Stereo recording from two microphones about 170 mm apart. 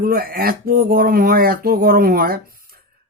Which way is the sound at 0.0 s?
60° right (ahead or behind).